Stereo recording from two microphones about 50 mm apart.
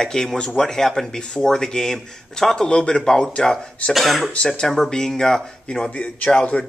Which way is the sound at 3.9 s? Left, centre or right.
Centre.